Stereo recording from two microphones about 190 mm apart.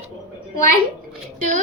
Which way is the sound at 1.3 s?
45° right (ahead or behind).